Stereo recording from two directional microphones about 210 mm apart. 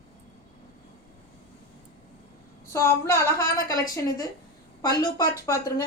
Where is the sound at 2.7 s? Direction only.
15° left (ahead or behind).